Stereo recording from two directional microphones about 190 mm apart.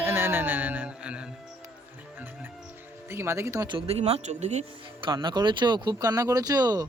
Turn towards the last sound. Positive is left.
turn(degrees=-20)  # may be behind; listen again after turning